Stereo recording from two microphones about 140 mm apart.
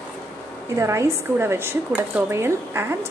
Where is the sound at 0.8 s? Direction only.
20° right (ahead or behind).